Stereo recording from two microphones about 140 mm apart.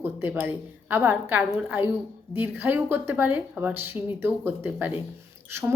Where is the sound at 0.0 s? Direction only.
15° right (ahead or behind).